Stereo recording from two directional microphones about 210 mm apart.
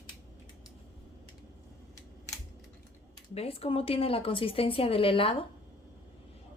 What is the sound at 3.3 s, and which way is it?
A woman's voice, 30° left (ahead or behind).